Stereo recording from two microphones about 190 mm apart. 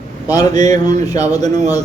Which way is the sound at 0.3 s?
20° left (ahead or behind).